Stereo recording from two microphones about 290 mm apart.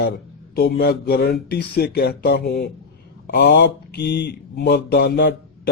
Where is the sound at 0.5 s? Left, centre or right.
Left.